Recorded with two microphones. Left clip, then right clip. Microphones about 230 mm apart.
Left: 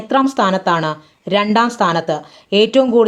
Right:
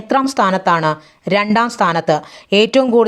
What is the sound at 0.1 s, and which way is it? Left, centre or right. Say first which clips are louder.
Speech: even; right.